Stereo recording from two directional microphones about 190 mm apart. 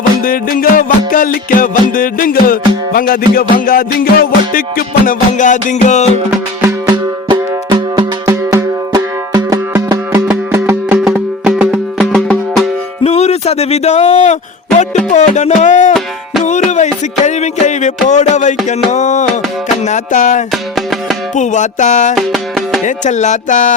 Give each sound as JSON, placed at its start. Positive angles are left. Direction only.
{"t": 0.2, "sound": "music", "side_deg": 50}
{"t": 6.7, "sound": "music", "side_deg": -20}
{"t": 13.0, "sound": "music", "side_deg": 35}
{"t": 15.9, "sound": "music", "side_deg": 0}
{"t": 16.4, "sound": "music", "side_deg": 40}
{"t": 18.9, "sound": "speech", "side_deg": 40}
{"t": 19.8, "sound": "music", "side_deg": 40}
{"t": 20.5, "sound": "music", "side_deg": 0}
{"t": 21.3, "sound": "speech", "side_deg": 40}
{"t": 22.1, "sound": "music", "side_deg": 0}
{"t": 22.9, "sound": "speech", "side_deg": 40}